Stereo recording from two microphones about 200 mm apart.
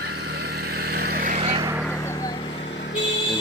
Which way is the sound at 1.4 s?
20° right (ahead or behind).